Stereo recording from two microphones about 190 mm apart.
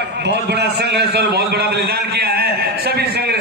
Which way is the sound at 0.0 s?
60° right (ahead or behind).